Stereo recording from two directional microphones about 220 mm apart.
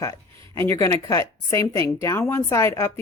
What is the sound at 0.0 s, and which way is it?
A woman's voice, 15° left (ahead or behind).